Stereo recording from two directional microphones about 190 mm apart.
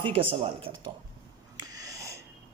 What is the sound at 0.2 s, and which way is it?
Speech, 30° right (ahead or behind).